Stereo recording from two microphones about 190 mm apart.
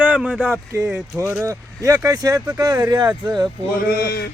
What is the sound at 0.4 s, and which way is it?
Speech, 15° right (ahead or behind).